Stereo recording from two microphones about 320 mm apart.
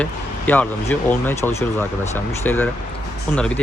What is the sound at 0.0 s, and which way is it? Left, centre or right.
Speech, centre.